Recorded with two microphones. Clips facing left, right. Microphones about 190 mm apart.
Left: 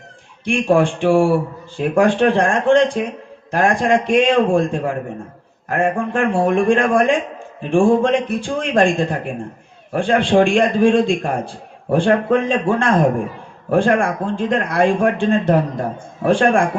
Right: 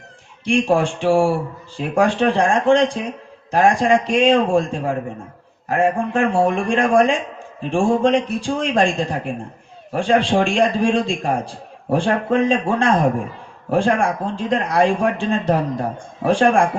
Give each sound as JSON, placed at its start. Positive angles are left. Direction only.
{"t": 0.4, "sound": "a man's voice", "side_deg": 55}